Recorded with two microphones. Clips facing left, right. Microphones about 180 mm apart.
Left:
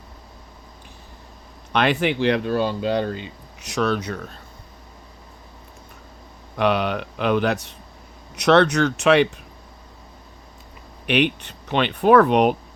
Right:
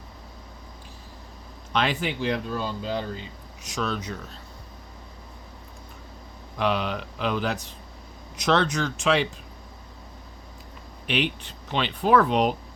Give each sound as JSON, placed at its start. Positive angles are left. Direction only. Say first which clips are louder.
{"t": 1.7, "sound": "speech", "louder": "left 6 dB", "side_deg": 65}
{"t": 6.6, "sound": "speech", "louder": "left 5 dB", "side_deg": 65}
{"t": 11.0, "sound": "speech", "louder": "left 6 dB", "side_deg": 65}